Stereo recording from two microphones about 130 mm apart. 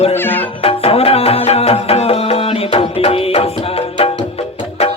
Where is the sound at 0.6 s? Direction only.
50° left (ahead or behind).